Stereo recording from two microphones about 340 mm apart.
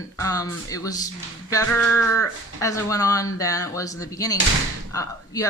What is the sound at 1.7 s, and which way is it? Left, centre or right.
Music, left.